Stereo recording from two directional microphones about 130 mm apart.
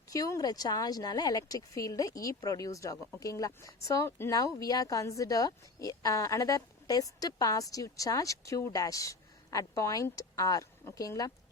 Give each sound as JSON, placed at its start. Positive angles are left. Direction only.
{"t": 0.1, "sound": "speech", "side_deg": 25}